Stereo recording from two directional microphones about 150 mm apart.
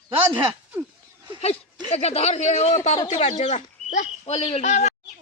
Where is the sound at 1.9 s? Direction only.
45° left (ahead or behind).